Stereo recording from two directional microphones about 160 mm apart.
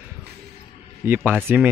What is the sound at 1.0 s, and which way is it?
Speech, 10° right (ahead or behind).